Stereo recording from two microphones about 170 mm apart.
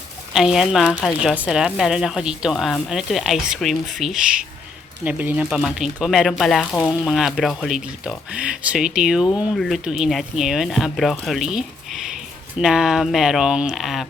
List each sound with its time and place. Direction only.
0.3 s speech: centre (ahead or behind)
9.2 s speech: 20° left (ahead or behind)
9.6 s speech: centre (ahead or behind)